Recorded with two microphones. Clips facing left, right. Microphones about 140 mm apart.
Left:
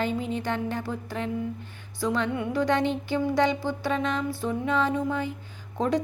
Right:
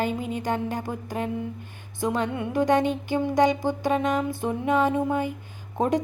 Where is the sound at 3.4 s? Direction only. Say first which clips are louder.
Right 3 dB; 45° right (ahead or behind).